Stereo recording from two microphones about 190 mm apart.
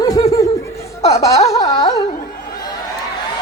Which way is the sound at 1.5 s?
20° left (ahead or behind).